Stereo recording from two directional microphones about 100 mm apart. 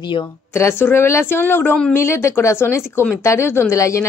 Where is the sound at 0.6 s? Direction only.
25° left (ahead or behind).